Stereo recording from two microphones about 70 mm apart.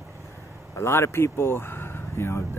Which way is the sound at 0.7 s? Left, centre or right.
Left.